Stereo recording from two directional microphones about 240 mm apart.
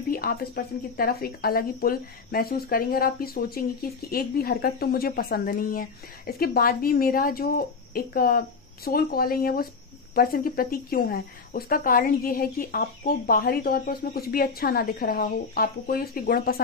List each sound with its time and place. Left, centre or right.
0.1 s speech: left